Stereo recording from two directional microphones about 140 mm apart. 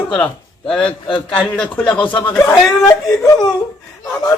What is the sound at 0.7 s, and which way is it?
A man's voice, 10° left (ahead or behind).